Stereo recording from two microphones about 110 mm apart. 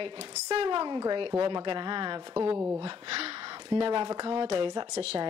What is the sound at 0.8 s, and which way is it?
Speech, 35° right (ahead or behind).